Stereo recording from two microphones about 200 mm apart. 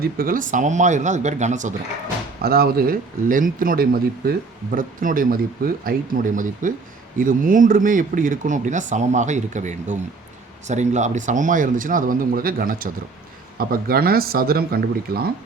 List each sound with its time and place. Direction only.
0.0 s speech: 45° right (ahead or behind)
2.4 s speech: 50° right (ahead or behind)